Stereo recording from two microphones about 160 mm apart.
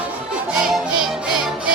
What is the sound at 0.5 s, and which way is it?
Music, 5° right (ahead or behind).